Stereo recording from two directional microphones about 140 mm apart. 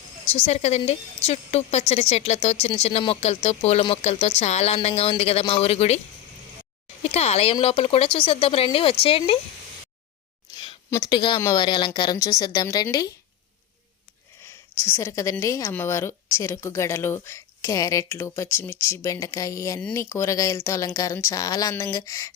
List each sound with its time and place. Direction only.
0.4 s a woman's voice: 50° left (ahead or behind)
7.0 s speech: 50° left (ahead or behind)
10.5 s a sound: 40° left (ahead or behind)
10.9 s a woman's voice: 25° left (ahead or behind)
11.6 s a woman's voice: 35° left (ahead or behind)
14.4 s a woman's voice: 15° left (ahead or behind)